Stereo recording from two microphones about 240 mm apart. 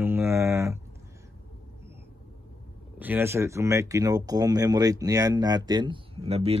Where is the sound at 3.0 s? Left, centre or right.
Centre.